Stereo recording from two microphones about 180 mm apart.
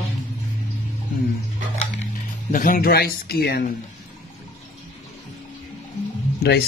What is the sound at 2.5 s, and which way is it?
Speech, 50° left (ahead or behind).